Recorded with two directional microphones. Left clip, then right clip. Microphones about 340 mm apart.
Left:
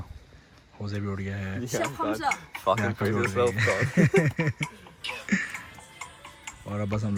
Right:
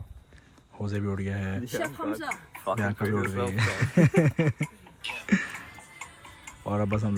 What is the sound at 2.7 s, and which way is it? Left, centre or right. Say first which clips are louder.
Speech: left 2 dB; centre.